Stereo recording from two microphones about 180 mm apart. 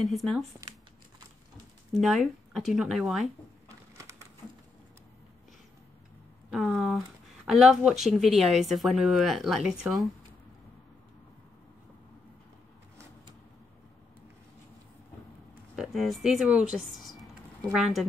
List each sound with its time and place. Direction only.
0.0 s speech: centre (ahead or behind)
1.9 s speech: centre (ahead or behind)
3.6 s a sound: 15° right (ahead or behind)
6.5 s speech: 5° right (ahead or behind)
15.7 s speech: centre (ahead or behind)
17.2 s a sound: centre (ahead or behind)